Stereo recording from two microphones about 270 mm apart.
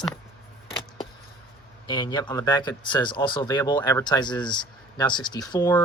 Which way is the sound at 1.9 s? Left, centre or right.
Centre.